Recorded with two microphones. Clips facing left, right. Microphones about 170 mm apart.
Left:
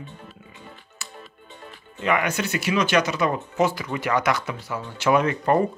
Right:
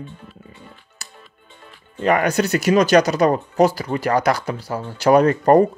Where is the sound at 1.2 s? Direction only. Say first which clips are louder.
Left 4 dB; 70° left (ahead or behind).